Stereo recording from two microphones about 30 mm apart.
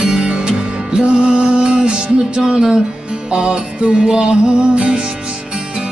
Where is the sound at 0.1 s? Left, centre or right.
Right.